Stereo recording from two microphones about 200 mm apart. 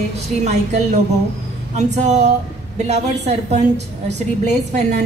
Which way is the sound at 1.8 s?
35° right (ahead or behind).